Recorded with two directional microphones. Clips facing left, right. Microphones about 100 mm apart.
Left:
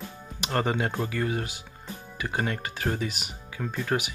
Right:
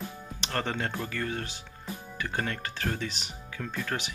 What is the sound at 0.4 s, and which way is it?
Speech, 15° left (ahead or behind).